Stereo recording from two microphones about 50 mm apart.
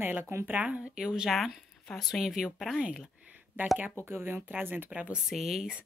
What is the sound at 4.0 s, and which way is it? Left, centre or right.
Speech, right.